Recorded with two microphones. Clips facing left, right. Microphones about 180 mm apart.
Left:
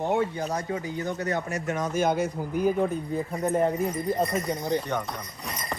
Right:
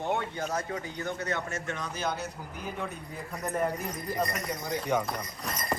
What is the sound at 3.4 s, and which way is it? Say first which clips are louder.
Speech: left 6 dB; 20° left (ahead or behind).